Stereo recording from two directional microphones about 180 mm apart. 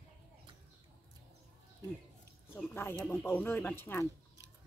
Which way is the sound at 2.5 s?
10° left (ahead or behind).